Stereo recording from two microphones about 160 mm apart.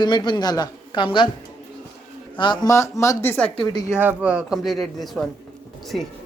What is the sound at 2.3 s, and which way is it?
Speech, 30° left (ahead or behind).